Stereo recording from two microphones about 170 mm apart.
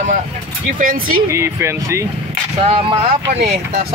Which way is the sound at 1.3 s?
15° right (ahead or behind).